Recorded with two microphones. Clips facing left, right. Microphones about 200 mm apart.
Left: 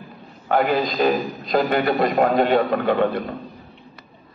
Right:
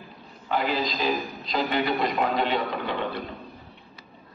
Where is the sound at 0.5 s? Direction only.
55° left (ahead or behind).